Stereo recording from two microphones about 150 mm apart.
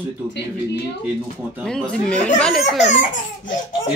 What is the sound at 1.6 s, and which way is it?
Snicker, 5° left (ahead or behind).